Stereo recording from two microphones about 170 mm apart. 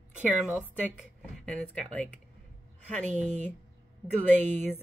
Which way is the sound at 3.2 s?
45° right (ahead or behind).